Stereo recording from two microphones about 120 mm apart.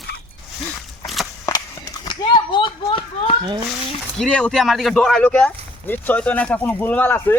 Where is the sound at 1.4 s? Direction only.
25° left (ahead or behind).